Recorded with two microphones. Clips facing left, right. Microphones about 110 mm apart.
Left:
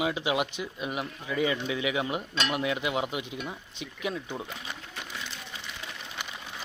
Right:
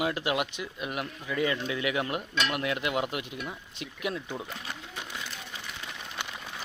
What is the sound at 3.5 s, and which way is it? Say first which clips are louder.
Speech: even; 5° right (ahead or behind).